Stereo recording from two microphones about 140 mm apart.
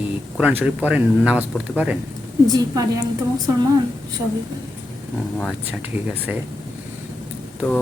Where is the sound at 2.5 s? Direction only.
30° right (ahead or behind).